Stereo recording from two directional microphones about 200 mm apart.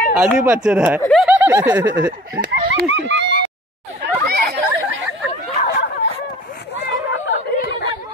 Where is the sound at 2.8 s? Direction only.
60° right (ahead or behind).